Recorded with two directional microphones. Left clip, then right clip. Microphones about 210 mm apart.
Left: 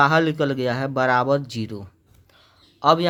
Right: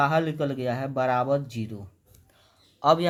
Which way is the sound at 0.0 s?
25° left (ahead or behind).